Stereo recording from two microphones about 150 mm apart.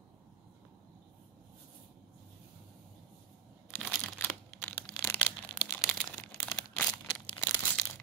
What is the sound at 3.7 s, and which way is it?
Crumpling, 10° left (ahead or behind).